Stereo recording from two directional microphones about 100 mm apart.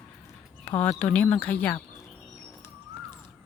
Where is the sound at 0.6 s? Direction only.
15° left (ahead or behind).